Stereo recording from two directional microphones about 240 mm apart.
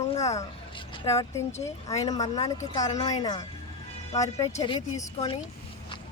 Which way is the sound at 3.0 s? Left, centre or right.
Centre.